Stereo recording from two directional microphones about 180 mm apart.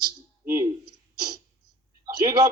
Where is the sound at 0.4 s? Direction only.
20° right (ahead or behind).